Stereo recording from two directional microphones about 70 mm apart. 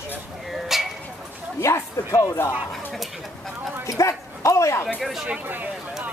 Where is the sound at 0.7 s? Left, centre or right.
Centre.